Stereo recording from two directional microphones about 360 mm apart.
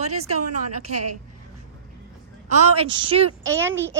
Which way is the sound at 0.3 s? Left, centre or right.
Right.